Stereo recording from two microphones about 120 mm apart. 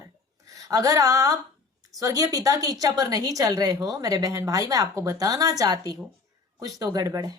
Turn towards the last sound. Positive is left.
turn(degrees=-30)  # may be behind; listen again after turning